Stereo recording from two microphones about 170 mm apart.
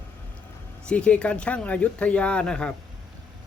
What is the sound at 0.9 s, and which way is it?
Speech, 5° left (ahead or behind).